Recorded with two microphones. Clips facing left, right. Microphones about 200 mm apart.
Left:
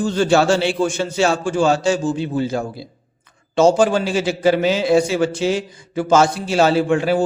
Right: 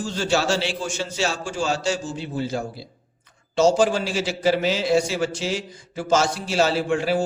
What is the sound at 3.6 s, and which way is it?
A man's voice, 55° left (ahead or behind).